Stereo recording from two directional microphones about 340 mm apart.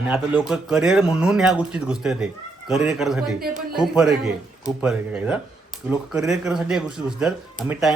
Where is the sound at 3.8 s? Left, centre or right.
Centre.